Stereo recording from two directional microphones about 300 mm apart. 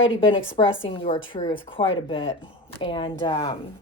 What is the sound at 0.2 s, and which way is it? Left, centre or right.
A woman's voice, centre.